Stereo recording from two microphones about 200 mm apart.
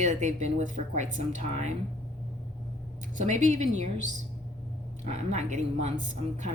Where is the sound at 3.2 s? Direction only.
35° right (ahead or behind).